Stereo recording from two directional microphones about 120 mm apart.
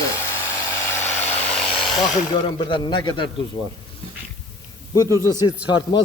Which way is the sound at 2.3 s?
45° left (ahead or behind).